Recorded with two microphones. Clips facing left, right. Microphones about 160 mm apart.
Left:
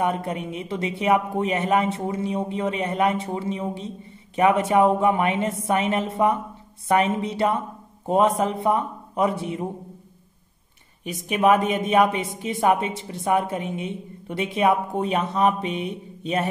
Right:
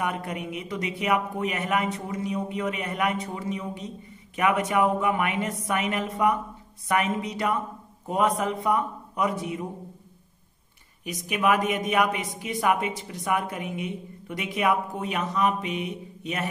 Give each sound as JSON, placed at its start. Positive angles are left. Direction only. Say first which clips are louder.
{"t": 0.0, "sound": "a man's voice", "louder": "left 5 dB", "side_deg": 30}
{"t": 11.1, "sound": "a man's voice", "louder": "left 5 dB", "side_deg": 30}